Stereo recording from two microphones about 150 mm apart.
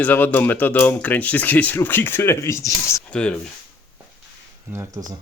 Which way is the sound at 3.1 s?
5° left (ahead or behind).